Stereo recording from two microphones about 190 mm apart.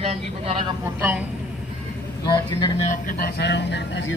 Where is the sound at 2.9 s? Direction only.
50° left (ahead or behind); by 4.1 s 70° left (ahead or behind).